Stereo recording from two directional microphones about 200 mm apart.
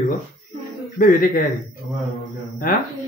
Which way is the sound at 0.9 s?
45° left (ahead or behind).